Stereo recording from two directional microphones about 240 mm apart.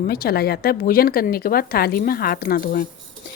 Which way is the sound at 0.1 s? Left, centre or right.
Left.